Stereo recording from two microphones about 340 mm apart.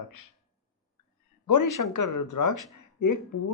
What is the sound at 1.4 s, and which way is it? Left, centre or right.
Speech, left.